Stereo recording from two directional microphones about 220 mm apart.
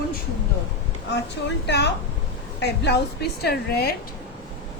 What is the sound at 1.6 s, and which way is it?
A woman's voice, 50° left (ahead or behind).